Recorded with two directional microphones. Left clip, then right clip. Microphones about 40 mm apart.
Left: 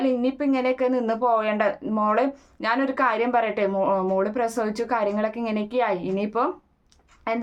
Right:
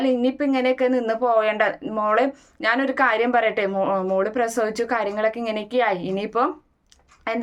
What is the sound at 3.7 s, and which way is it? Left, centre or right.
A woman's voice, left.